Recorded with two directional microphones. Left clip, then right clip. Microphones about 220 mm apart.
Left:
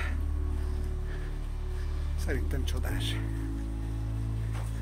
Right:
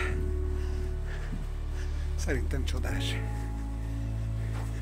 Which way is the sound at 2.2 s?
20° right (ahead or behind).